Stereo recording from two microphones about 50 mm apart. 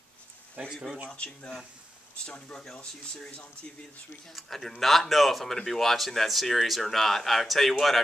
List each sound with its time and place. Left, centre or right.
0.6 s speech: right
1.1 s speech: left
4.3 s speech: centre